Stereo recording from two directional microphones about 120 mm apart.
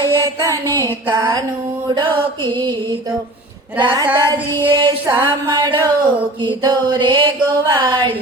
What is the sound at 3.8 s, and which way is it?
Music, 40° right (ahead or behind).